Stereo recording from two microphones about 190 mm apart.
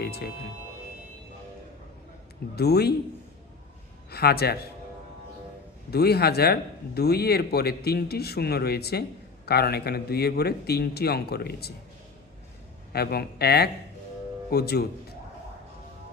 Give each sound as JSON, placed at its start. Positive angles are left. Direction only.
{"t": 0.0, "sound": "speech", "side_deg": 55}
{"t": 2.6, "sound": "speech", "side_deg": 55}
{"t": 4.1, "sound": "speech", "side_deg": 55}
{"t": 5.9, "sound": "speech", "side_deg": 55}
{"t": 12.9, "sound": "speech", "side_deg": 55}